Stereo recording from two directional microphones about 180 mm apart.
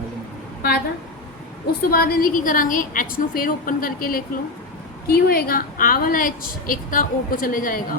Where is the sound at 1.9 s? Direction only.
55° left (ahead or behind).